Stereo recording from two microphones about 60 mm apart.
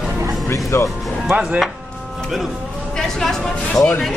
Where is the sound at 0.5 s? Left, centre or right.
Left.